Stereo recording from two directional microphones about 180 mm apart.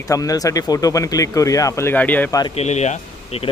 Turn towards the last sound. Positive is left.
turn(degrees=35)  # may be behind; listen again after turning